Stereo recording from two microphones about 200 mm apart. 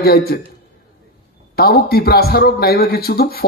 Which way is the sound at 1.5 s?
50° left (ahead or behind).